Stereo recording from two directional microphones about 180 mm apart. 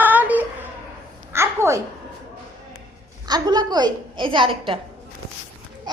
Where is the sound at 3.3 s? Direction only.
25° right (ahead or behind).